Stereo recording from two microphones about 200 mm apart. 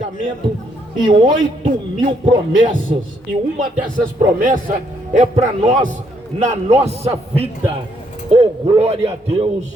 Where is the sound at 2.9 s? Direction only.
35° right (ahead or behind).